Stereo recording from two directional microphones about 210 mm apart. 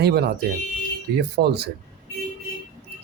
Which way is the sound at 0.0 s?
50° right (ahead or behind).